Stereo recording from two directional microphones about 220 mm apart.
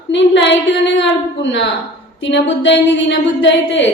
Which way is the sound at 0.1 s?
55° left (ahead or behind).